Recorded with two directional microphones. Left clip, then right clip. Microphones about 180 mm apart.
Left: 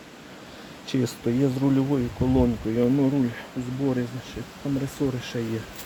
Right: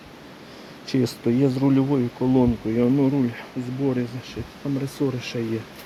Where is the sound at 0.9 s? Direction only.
10° right (ahead or behind).